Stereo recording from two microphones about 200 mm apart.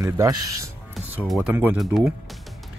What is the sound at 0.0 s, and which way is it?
Speech, 15° right (ahead or behind).